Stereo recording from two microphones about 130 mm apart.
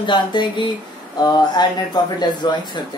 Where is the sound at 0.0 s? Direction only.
35° left (ahead or behind).